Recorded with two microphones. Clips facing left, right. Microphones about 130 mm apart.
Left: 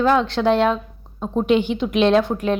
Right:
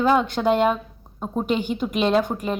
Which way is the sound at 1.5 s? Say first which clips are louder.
Left 5 dB; 45° right (ahead or behind).